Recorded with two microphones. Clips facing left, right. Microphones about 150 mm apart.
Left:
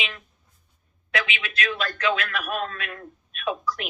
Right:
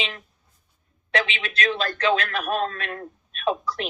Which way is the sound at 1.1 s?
30° right (ahead or behind).